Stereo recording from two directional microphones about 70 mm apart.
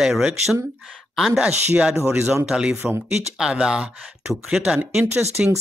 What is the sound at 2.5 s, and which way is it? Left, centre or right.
Speech, centre.